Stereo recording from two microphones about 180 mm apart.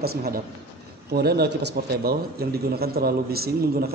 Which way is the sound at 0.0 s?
60° right (ahead or behind).